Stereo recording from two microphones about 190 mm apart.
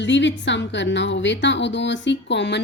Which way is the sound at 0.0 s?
70° left (ahead or behind).